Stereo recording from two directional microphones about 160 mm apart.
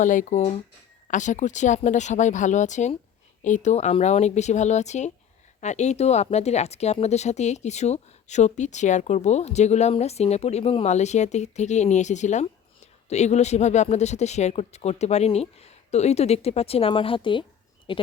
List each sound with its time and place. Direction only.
0.0 s speech: 55° left (ahead or behind); by 18.0 s 30° left (ahead or behind)